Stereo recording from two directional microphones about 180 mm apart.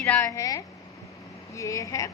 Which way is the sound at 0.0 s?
15° left (ahead or behind).